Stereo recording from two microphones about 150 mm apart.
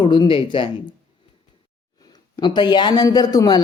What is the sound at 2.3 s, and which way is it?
A man's voice, 30° left (ahead or behind).